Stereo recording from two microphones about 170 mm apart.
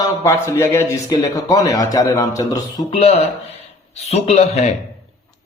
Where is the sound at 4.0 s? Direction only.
40° left (ahead or behind).